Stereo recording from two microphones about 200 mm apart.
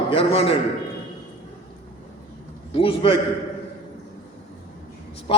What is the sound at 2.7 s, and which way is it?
Speech, 25° left (ahead or behind).